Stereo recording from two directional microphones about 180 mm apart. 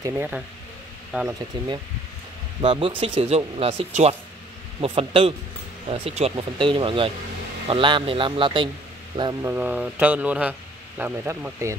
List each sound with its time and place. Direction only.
0.0 s a man's voice: 10° right (ahead or behind)
2.6 s a man's voice: 30° right (ahead or behind); by 11.7 s 10° right (ahead or behind)